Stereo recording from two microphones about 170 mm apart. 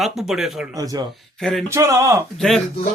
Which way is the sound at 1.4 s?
Centre (ahead or behind).